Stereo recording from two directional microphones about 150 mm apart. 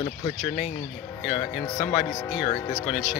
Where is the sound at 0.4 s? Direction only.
45° left (ahead or behind).